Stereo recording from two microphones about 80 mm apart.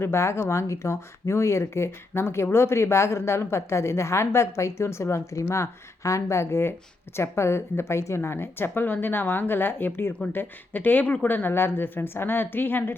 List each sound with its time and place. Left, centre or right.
0.0 s speech: left